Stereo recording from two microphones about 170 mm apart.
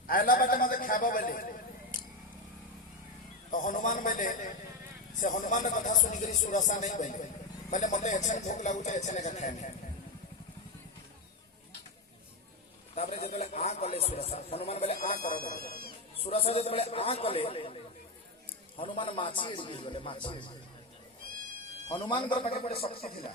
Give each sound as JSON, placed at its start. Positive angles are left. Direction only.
{"t": 0.1, "sound": "a sound", "side_deg": 55}
{"t": 3.5, "sound": "a sound", "side_deg": 55}
{"t": 5.2, "sound": "speech", "side_deg": 50}
{"t": 12.9, "sound": "a sound", "side_deg": 40}
{"t": 13.2, "sound": "speech", "side_deg": 40}
{"t": 15.1, "sound": "speech", "side_deg": 60}
{"t": 16.1, "sound": "speech", "side_deg": 35}
{"t": 18.8, "sound": "a man's voice", "side_deg": 30}
{"t": 21.8, "sound": "a man's voice", "side_deg": 25}